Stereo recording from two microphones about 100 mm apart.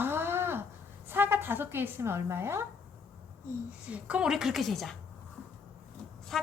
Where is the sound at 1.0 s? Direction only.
20° right (ahead or behind).